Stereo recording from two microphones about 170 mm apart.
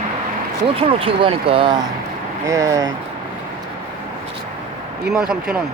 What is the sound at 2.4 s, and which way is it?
Speech, 20° right (ahead or behind).